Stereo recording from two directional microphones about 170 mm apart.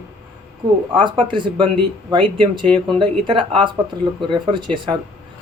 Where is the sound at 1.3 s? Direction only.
25° right (ahead or behind).